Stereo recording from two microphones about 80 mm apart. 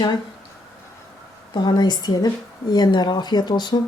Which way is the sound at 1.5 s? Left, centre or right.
Left.